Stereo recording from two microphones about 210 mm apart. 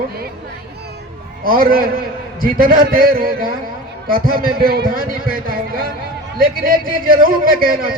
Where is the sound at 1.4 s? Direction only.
40° right (ahead or behind).